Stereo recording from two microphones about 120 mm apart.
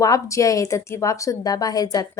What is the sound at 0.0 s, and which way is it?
A woman's voice, 25° left (ahead or behind).